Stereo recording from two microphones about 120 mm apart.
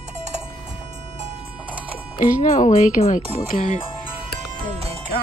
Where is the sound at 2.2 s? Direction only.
90° left.